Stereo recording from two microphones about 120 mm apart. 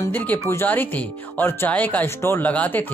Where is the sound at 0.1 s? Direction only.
15° left (ahead or behind).